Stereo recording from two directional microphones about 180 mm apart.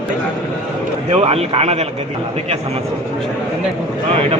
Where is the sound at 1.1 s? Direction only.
35° right (ahead or behind).